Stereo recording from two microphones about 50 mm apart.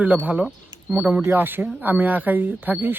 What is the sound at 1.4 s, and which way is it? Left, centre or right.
Speech, right.